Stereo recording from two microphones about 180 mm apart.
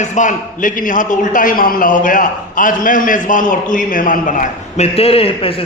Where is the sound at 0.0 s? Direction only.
40° left (ahead or behind).